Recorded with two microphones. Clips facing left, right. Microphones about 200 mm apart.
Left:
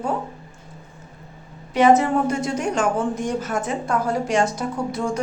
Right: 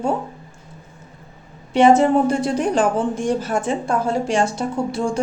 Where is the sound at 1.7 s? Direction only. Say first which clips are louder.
Right 3 dB; 30° right (ahead or behind).